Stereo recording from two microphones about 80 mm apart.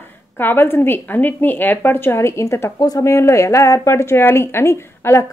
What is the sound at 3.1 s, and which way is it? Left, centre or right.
Speech, left.